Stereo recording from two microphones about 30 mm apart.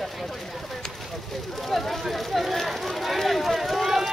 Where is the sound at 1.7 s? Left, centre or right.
Centre.